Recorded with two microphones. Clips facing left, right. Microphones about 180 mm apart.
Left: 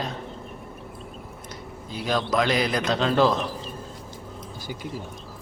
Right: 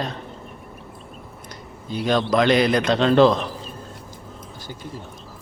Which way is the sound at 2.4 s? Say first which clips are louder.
Right 6 dB; 65° right (ahead or behind).